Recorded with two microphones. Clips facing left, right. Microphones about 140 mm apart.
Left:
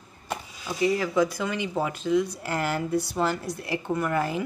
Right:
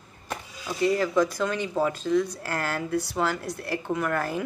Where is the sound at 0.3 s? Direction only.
10° left (ahead or behind).